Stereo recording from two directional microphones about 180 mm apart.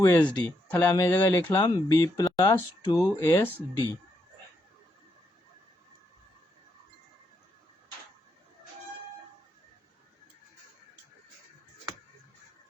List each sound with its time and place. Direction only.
0.0 s speech: 10° left (ahead or behind)